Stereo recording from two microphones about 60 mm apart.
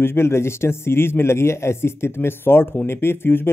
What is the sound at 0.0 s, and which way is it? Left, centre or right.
Speech, left.